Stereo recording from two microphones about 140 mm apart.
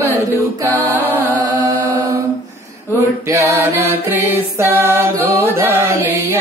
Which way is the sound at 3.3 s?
20° right (ahead or behind).